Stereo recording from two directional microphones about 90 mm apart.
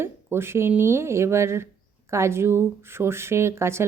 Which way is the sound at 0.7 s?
25° right (ahead or behind).